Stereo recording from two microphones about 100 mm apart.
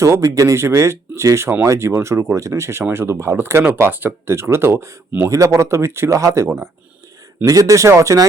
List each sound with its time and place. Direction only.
0.0 s speech: 30° right (ahead or behind)